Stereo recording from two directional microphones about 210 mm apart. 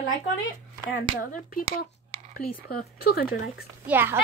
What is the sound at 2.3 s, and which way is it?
A woman's voice, 45° left (ahead or behind).